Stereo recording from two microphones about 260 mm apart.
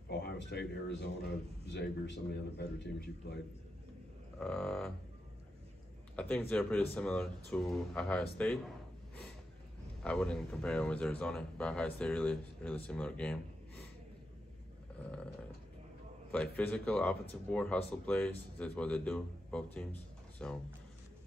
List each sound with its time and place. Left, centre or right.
0.1 s a man's voice: left
4.4 s speech: centre
6.1 s speech: centre
10.0 s speech: centre
16.3 s speech: centre